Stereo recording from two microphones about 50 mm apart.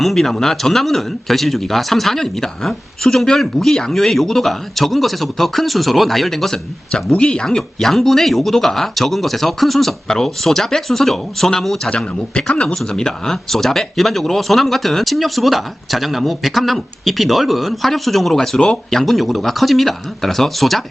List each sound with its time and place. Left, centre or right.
0.0 s speech: centre
7.1 s speech: centre
11.9 s a man's voice: centre